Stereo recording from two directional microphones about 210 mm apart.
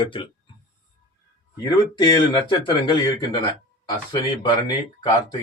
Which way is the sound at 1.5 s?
20° left (ahead or behind).